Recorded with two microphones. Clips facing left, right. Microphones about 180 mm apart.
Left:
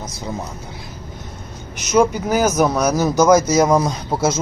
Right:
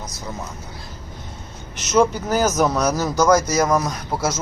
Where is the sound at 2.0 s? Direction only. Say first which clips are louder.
Left 2 dB; 10° left (ahead or behind).